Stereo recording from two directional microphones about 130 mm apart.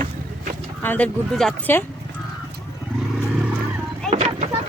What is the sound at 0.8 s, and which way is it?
Speech, 10° left (ahead or behind).